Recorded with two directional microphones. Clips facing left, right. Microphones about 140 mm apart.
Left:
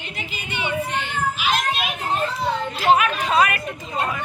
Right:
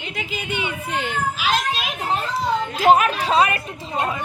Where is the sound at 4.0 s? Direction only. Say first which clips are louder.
Right 1 dB; 20° right (ahead or behind).